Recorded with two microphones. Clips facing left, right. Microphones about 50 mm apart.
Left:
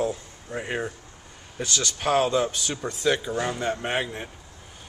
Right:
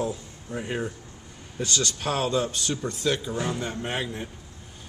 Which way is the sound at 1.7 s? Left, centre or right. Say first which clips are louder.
Left 5 dB; left.